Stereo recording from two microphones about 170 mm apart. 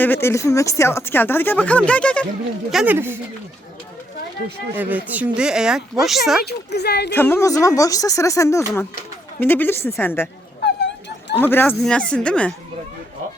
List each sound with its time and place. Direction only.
0.0 s speech: 15° left (ahead or behind)
2.7 s speech: 10° right (ahead or behind)
4.8 s speech: 10° right (ahead or behind)
6.4 s a woman's voice: 75° left (ahead or behind)
7.1 s speech: 10° left (ahead or behind)
10.6 s a sound: 85° left
11.3 s speech: 10° left (ahead or behind)